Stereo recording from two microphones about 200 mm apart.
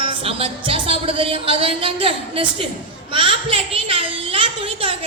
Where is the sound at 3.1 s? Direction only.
25° right (ahead or behind).